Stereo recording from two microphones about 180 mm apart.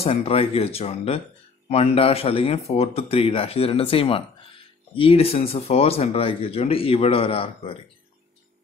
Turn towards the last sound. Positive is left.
turn(degrees=30)  # may be behind; listen again after turning